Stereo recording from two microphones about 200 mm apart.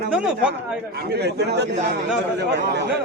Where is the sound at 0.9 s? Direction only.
55° right (ahead or behind).